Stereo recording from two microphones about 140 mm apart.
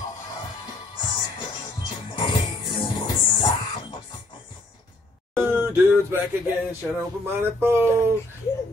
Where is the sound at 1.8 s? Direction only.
35° left (ahead or behind).